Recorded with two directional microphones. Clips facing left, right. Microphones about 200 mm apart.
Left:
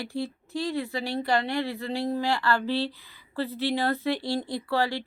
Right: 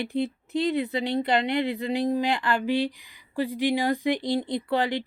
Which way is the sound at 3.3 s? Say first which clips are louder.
Right 3 dB; 15° right (ahead or behind).